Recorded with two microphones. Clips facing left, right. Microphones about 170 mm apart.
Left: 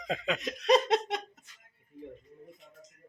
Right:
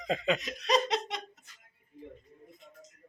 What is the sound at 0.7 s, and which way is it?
Speech, 55° left (ahead or behind).